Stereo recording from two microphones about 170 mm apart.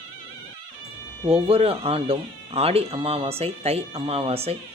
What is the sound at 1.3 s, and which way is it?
Speech, 35° right (ahead or behind).